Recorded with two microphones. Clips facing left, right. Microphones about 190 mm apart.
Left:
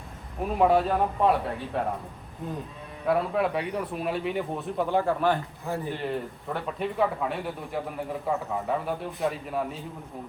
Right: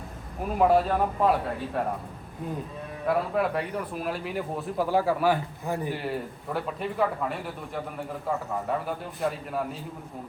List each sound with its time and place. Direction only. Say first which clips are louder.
0.4 s speech: even; centre (ahead or behind)
3.1 s speech: left 1 dB; centre (ahead or behind)